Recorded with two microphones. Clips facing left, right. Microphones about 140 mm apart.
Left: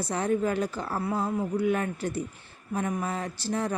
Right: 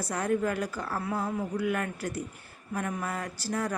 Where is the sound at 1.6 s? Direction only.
25° left (ahead or behind).